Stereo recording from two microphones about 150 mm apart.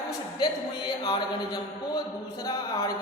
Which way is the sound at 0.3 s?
30° left (ahead or behind).